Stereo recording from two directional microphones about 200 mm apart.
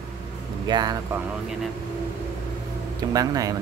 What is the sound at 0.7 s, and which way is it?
Speech, 20° right (ahead or behind).